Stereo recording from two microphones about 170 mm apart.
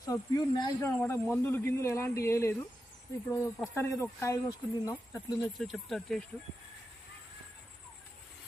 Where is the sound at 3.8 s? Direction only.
15° left (ahead or behind).